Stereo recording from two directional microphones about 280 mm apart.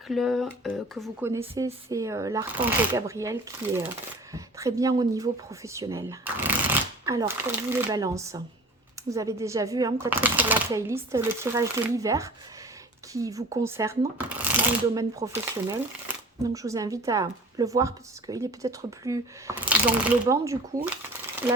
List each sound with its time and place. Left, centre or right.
0.1 s speech: centre